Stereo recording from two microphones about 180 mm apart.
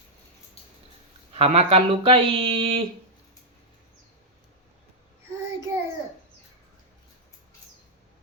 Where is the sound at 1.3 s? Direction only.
35° right (ahead or behind).